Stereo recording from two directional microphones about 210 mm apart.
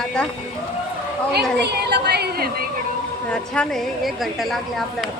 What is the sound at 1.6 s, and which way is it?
Speech, 50° right (ahead or behind).